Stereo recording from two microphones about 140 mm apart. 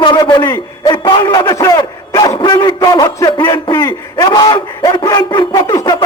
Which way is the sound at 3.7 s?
20° left (ahead or behind).